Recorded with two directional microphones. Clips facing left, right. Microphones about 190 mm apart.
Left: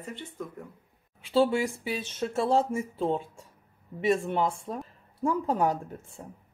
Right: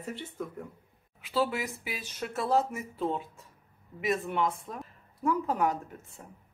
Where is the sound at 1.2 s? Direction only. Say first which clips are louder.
Left 6 dB; 30° left (ahead or behind).